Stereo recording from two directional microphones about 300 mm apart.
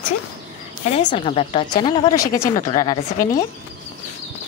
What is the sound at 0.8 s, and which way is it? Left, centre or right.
Speech, left.